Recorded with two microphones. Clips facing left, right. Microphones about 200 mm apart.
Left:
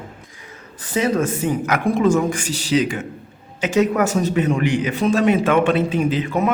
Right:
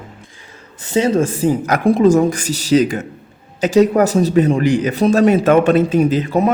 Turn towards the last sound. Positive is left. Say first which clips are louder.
# right 4 dB
turn(degrees=-35)  # may be behind; listen again after turning